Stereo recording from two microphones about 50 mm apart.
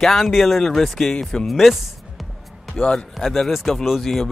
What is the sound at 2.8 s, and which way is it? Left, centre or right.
Speech, centre.